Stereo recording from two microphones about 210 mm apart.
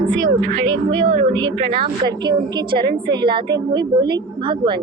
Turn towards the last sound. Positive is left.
turn(degrees=-20)  # may be behind; listen again after turning